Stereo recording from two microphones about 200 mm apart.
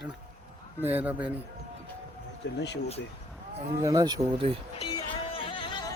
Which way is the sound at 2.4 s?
65° left (ahead or behind).